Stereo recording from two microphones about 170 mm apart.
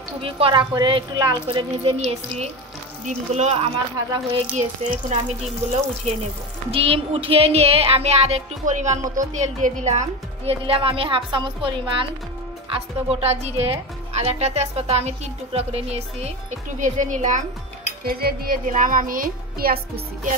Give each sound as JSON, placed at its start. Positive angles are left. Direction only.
{"t": 0.2, "sound": "speech", "side_deg": -30}
{"t": 6.7, "sound": "speech", "side_deg": -35}
{"t": 12.7, "sound": "speech", "side_deg": -35}
{"t": 16.8, "sound": "speech", "side_deg": -50}
{"t": 18.0, "sound": "speech", "side_deg": -60}